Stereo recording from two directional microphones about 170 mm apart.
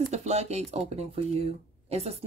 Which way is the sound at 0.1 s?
40° right (ahead or behind).